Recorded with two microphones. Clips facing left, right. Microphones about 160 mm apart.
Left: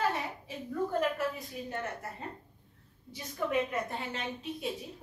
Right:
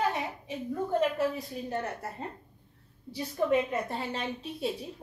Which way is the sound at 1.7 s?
35° right (ahead or behind).